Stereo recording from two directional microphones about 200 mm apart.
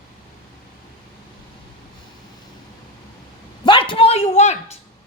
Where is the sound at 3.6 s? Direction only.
25° left (ahead or behind).